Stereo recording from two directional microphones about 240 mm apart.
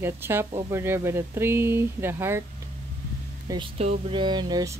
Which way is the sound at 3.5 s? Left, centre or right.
Right.